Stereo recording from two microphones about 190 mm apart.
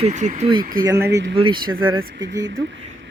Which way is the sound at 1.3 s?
25° right (ahead or behind).